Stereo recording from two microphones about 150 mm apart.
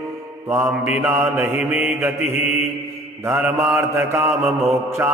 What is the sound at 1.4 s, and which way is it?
Mantra, 15° right (ahead or behind).